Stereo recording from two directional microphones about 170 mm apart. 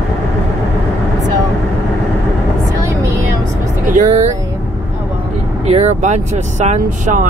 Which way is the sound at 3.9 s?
45° right (ahead or behind).